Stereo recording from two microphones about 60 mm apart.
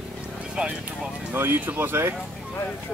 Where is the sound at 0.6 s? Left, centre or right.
Centre.